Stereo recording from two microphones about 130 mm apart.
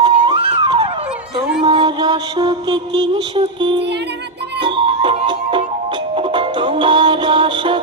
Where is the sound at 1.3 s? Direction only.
40° right (ahead or behind).